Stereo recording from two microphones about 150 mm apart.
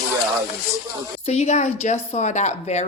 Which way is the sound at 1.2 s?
45° left (ahead or behind).